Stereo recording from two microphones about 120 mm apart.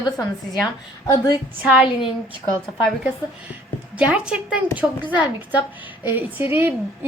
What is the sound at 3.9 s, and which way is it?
A woman's voice, 10° right (ahead or behind).